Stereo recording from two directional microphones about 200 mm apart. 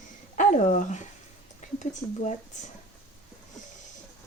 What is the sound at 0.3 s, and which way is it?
Speech, 40° left (ahead or behind).